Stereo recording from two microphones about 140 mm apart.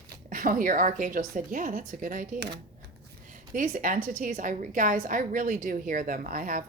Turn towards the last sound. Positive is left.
turn(degrees=-70)  # may be behind; listen again after turning